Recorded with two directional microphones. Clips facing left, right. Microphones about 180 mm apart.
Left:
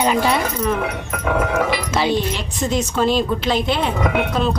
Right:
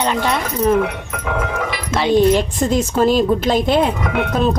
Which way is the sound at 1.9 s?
5° left (ahead or behind).